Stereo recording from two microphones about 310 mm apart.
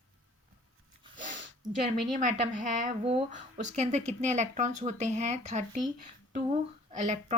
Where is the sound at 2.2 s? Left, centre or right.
Right.